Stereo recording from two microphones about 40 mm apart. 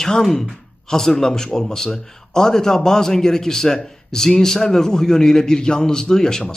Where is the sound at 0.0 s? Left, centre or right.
Centre.